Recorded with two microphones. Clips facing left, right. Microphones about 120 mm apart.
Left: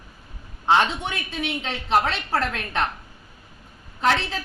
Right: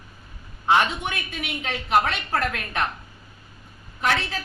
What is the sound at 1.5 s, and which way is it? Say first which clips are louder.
A woman's voice: left 1 dB; 30° left (ahead or behind).